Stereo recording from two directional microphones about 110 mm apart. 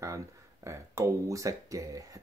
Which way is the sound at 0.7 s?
25° right (ahead or behind).